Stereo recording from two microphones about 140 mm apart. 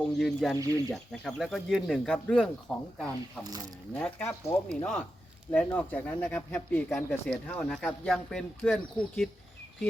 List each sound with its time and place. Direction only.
0.2 s speech: centre (ahead or behind)
0.6 s speech: 25° right (ahead or behind)
1.1 s speech: 5° left (ahead or behind)
3.4 s speech: 25° right (ahead or behind)
3.9 s speech: 5° left (ahead or behind)